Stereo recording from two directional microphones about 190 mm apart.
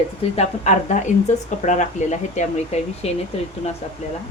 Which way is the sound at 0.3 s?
40° left (ahead or behind).